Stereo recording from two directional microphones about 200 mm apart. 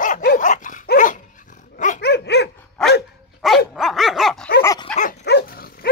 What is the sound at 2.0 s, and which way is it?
Dog, 55° left (ahead or behind).